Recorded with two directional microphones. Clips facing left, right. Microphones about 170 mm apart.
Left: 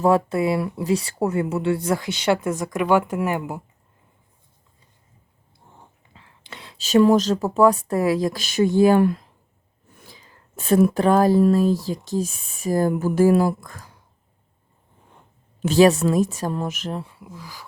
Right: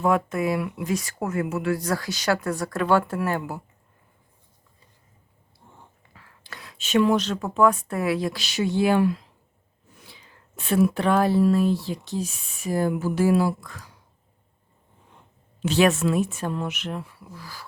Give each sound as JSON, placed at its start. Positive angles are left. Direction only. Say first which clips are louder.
{"t": 0.0, "sound": "speech", "louder": "left 4 dB", "side_deg": 30}
{"t": 6.1, "sound": "speech", "louder": "left 2 dB", "side_deg": 25}
{"t": 15.6, "sound": "speech", "louder": "left 5 dB", "side_deg": 40}